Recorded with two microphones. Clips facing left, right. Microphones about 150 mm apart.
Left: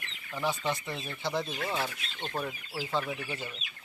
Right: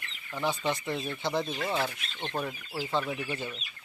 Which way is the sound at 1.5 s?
20° right (ahead or behind).